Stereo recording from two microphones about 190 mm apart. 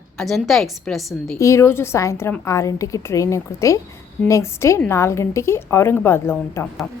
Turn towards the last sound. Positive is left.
turn(degrees=15)  # may be behind; listen again after turning